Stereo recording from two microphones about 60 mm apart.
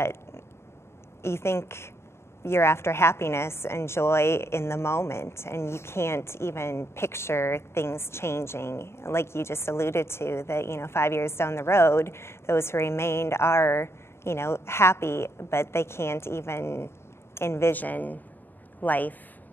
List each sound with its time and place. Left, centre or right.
0.0 s a sound: left
1.2 s a woman's voice: left
17.7 s speech: left